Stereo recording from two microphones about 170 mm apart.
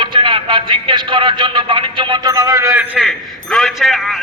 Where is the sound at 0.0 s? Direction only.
30° right (ahead or behind).